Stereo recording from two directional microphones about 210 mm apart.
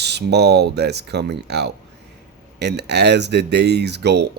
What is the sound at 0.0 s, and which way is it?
Speech, 50° right (ahead or behind).